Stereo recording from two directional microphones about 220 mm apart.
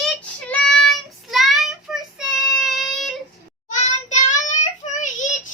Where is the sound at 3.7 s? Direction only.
35° left (ahead or behind).